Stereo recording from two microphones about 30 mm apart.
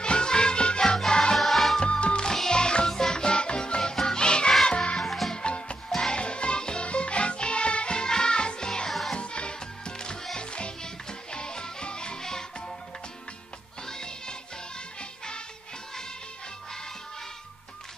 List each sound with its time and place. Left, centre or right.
0.0 s music: left
1.4 s music: centre
1.8 s music: left
5.0 s music: centre
5.3 s music: left
5.9 s music: left
6.2 s music: left
9.1 s music: left
13.8 s music: left